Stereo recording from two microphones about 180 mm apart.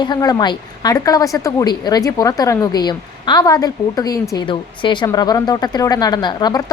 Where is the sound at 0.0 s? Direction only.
25° left (ahead or behind).